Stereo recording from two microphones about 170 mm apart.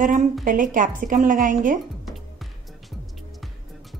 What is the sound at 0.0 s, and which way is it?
A woman's voice, 50° right (ahead or behind).